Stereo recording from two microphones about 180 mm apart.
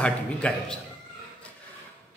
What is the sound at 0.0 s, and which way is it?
Speech, 5° left (ahead or behind).